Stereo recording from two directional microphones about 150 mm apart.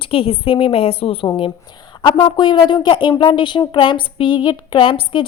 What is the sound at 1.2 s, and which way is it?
A woman's voice, 25° left (ahead or behind).